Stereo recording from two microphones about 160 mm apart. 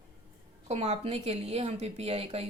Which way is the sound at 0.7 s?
45° right (ahead or behind).